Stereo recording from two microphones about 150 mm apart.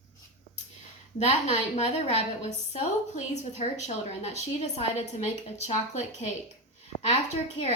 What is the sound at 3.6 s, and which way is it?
A woman's voice, 40° left (ahead or behind).